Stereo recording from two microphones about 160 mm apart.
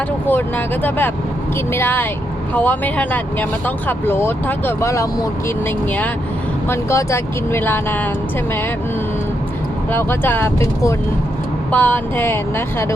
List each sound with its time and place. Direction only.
0.3 s speech: 10° left (ahead or behind)
6.7 s speech: 15° left (ahead or behind)
9.9 s speech: 15° left (ahead or behind)